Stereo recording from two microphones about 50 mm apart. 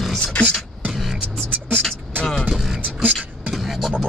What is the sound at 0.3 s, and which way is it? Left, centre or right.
Speech, left.